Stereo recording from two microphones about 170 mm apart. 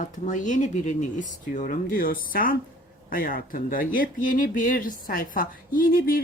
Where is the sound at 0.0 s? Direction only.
45° left (ahead or behind).